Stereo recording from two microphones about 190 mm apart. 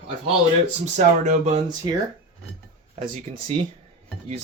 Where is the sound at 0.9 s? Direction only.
40° right (ahead or behind).